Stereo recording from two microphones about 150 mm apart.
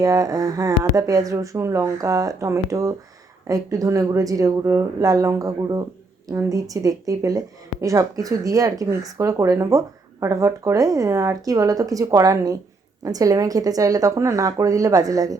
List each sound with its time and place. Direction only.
0.0 s speech: 25° right (ahead or behind)